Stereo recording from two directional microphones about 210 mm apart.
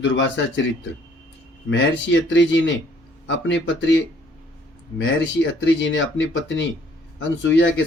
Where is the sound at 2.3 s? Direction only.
60° left (ahead or behind).